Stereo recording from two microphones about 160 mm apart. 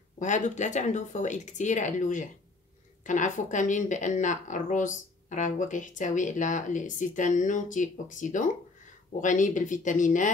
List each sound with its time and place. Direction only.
0.2 s speech: 50° left (ahead or behind)